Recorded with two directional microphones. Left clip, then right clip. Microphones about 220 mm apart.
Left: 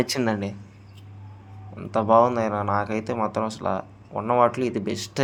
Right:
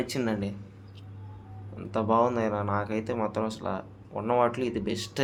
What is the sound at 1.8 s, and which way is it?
Speech, 15° left (ahead or behind).